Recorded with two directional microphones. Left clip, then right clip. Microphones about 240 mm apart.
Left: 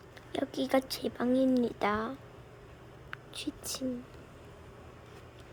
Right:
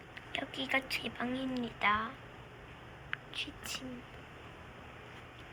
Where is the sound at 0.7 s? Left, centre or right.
Left.